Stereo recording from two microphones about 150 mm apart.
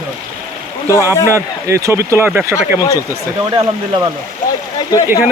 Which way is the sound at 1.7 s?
20° right (ahead or behind).